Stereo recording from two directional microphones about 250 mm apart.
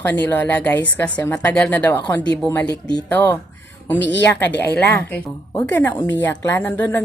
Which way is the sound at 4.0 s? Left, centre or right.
Left.